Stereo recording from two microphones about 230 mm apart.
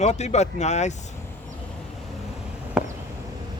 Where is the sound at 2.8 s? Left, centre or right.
Centre.